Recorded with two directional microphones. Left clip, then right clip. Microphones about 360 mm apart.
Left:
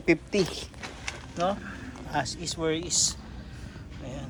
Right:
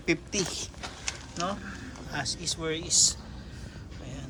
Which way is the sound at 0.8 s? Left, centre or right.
Centre.